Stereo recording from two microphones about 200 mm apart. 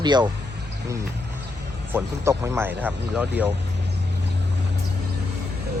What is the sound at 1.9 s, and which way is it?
Speech, 15° right (ahead or behind).